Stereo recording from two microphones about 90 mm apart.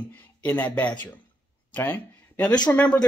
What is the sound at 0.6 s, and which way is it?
Speech, 15° left (ahead or behind).